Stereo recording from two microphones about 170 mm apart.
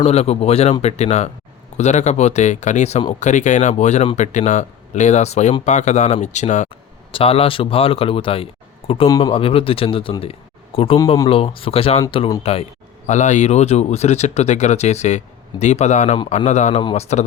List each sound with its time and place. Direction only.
0.0 s speech: 35° left (ahead or behind)
6.7 s speech: 30° left (ahead or behind)
9.0 s speech: 20° left (ahead or behind)
9.3 s speech: 35° left (ahead or behind)